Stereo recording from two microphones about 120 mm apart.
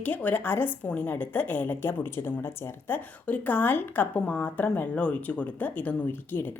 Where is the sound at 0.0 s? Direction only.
15° left (ahead or behind).